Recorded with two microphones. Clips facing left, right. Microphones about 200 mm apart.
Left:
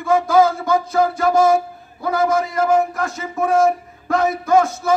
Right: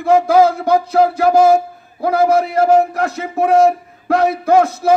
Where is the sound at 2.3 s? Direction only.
65° right (ahead or behind).